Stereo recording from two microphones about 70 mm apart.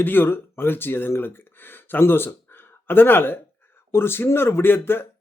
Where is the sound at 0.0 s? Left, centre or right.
Left.